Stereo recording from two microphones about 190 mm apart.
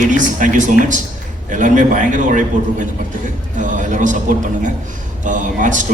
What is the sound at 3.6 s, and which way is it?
Speech, 40° right (ahead or behind).